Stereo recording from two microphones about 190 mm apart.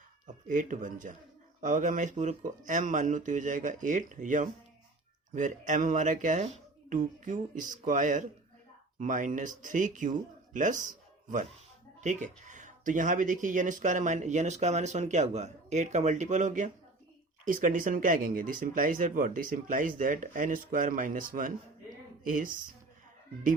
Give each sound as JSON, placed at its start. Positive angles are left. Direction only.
{"t": 0.4, "sound": "speech", "side_deg": -45}
{"t": 11.9, "sound": "speech", "side_deg": -40}